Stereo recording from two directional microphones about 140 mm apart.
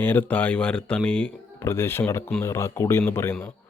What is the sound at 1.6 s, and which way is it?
Speech, 20° left (ahead or behind).